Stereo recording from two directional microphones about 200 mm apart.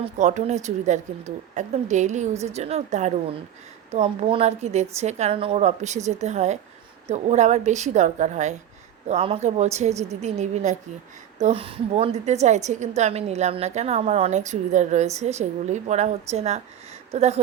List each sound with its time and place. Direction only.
0.0 s a woman's voice: 35° right (ahead or behind)